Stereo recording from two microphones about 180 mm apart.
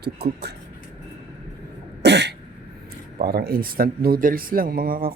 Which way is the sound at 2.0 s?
70° right (ahead or behind).